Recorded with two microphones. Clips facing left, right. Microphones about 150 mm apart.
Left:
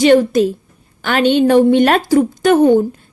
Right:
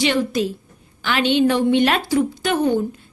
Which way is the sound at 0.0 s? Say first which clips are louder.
Left 9 dB; 45° left (ahead or behind).